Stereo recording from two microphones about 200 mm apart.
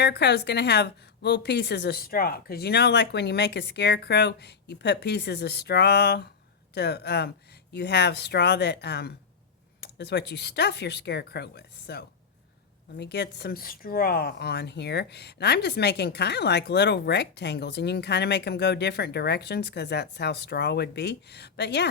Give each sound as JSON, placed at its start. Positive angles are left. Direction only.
{"t": 0.0, "sound": "speech", "side_deg": 55}